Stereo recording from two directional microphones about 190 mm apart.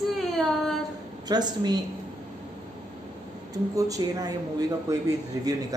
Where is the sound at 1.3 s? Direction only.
20° right (ahead or behind).